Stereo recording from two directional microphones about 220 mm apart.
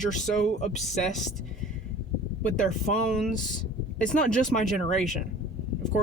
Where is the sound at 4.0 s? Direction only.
5° left (ahead or behind).